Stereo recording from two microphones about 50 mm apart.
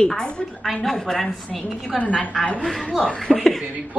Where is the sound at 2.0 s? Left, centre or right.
Left.